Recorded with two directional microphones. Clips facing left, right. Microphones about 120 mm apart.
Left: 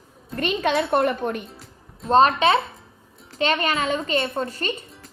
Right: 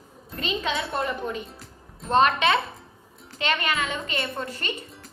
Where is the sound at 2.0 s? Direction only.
35° left (ahead or behind).